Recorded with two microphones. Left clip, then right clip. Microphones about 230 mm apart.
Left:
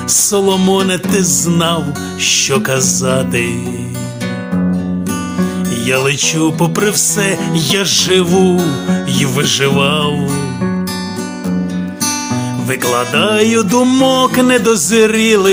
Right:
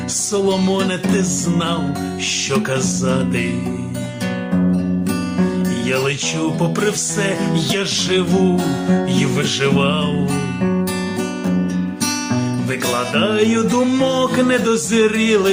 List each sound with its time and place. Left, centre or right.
0.3 s music: left
5.9 s music: left
12.8 s music: left